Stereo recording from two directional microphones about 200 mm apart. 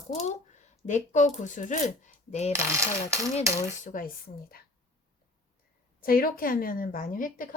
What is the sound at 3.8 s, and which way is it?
Speech, 45° left (ahead or behind).